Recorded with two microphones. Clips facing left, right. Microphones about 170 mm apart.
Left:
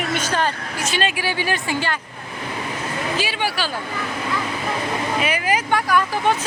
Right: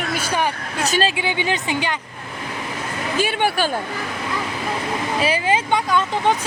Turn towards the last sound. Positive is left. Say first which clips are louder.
# even
turn(degrees=-20)  # may be behind; listen again after turning